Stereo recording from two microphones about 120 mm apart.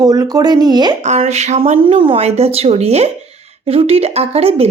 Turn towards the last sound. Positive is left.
turn(degrees=-55)  # may be behind; listen again after turning